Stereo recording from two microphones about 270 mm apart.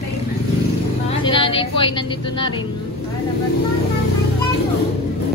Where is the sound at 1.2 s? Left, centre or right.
Centre.